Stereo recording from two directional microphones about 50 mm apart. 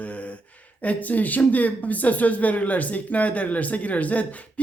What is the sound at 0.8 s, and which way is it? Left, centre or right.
Speech, left.